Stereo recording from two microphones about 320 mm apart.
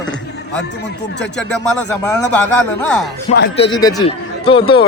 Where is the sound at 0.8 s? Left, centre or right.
Left.